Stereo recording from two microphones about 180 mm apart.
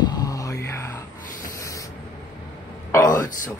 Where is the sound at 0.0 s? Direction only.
20° left (ahead or behind).